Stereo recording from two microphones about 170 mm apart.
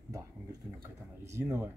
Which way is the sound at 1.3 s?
15° right (ahead or behind).